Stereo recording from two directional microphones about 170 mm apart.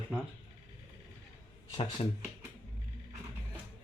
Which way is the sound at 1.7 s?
30° left (ahead or behind).